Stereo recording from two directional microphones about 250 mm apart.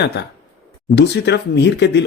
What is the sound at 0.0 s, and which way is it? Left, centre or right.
Speech, left.